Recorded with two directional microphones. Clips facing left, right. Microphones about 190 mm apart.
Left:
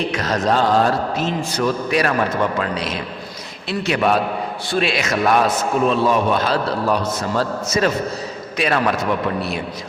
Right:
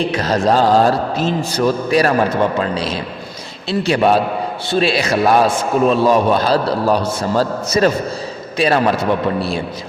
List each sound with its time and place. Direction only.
0.0 s a man's voice: 30° right (ahead or behind)